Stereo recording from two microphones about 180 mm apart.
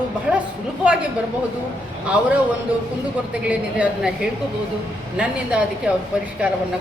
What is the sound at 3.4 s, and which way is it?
A woman's voice, 5° right (ahead or behind).